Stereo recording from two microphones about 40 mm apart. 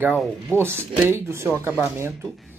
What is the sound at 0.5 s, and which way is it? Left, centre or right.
Speech, right.